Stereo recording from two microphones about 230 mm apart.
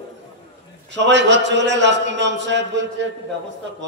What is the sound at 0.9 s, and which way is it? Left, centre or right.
A man's voice, right.